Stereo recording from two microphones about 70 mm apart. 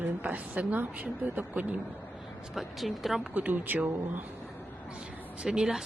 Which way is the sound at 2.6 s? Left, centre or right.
Centre.